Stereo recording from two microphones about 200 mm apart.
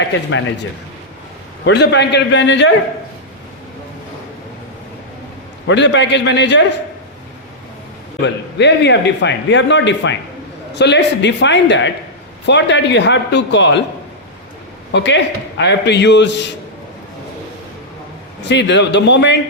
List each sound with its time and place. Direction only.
0.0 s a man's voice: 70° left (ahead or behind)
1.6 s speech: 60° left (ahead or behind)
5.6 s speech: 65° left (ahead or behind)
8.2 s speech: 60° left (ahead or behind)
14.9 s speech: 65° left (ahead or behind)
18.4 s speech: 60° left (ahead or behind)